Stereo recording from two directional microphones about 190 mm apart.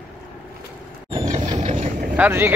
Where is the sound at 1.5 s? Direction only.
40° right (ahead or behind).